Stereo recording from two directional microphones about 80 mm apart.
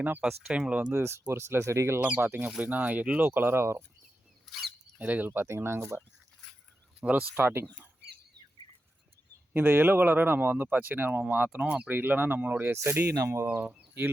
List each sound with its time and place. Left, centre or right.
0.0 s speech: centre
0.9 s speech: right
2.0 s speech: right
4.5 s speech: centre
4.9 s speech: right
6.4 s a sound: centre
7.0 s speech: centre
7.3 s speech: right
9.5 s speech: right
13.5 s speech: right